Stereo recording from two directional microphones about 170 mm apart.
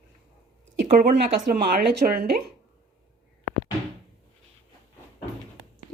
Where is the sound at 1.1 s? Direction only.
65° right (ahead or behind).